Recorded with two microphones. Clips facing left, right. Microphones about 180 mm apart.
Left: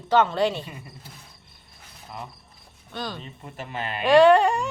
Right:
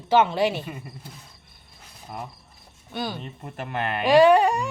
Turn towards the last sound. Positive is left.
turn(degrees=0)  # may be behind; listen again after turning